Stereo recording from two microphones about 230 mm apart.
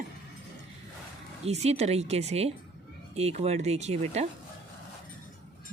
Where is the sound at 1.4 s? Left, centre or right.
Right.